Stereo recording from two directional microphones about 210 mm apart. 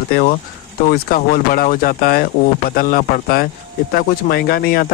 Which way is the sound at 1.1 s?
40° left (ahead or behind).